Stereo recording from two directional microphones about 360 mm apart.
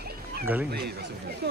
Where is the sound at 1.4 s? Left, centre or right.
Right.